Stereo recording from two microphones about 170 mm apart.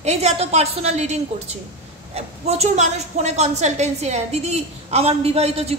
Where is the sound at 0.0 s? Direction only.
40° right (ahead or behind).